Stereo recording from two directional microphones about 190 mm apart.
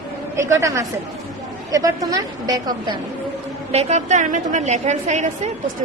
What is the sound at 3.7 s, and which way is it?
A woman's voice, 35° right (ahead or behind).